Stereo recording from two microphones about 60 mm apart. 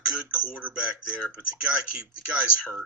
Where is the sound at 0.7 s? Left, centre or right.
Centre.